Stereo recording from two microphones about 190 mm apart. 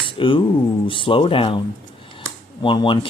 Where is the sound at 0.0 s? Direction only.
25° left (ahead or behind).